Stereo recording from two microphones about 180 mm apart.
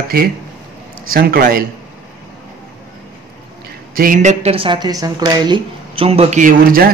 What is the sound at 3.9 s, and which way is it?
A woman's voice, 50° right (ahead or behind).